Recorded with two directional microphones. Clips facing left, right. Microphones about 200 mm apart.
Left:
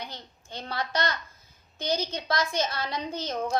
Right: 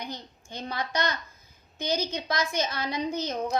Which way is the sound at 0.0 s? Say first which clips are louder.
Right 3 dB; 15° right (ahead or behind).